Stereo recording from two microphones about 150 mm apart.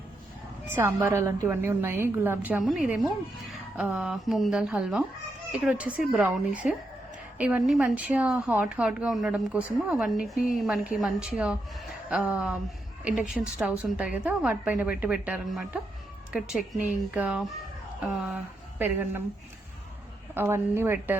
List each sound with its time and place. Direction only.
0.7 s speech: 20° right (ahead or behind)
18.8 s speech: 15° right (ahead or behind)
20.3 s speech: 15° right (ahead or behind)